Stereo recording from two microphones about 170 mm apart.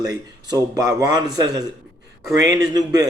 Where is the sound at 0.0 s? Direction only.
25° right (ahead or behind).